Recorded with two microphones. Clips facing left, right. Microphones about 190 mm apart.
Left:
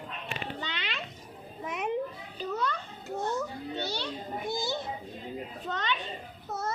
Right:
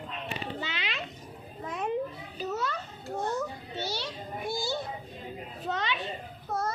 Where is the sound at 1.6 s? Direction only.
20° left (ahead or behind).